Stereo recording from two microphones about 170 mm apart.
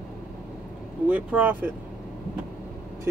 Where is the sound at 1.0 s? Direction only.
5° right (ahead or behind).